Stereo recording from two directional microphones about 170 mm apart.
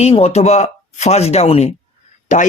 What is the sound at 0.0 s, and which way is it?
Speech, 35° left (ahead or behind).